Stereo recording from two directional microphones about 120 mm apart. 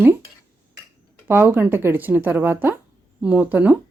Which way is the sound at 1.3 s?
20° right (ahead or behind).